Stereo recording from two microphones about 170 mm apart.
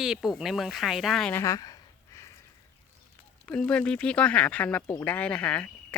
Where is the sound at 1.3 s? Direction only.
15° left (ahead or behind).